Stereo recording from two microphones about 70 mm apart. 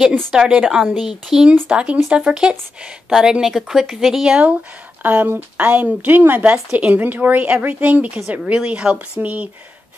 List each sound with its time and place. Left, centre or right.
0.3 s a woman's voice: centre
5.0 s a woman's voice: right